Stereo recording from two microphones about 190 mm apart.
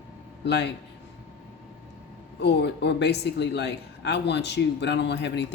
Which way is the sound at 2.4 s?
60° left (ahead or behind).